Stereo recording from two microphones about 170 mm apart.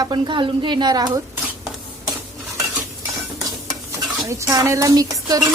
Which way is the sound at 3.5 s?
20° right (ahead or behind).